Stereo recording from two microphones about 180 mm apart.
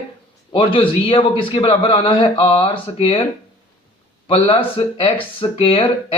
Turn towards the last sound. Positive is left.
turn(degrees=30)  # may be behind; listen again after turning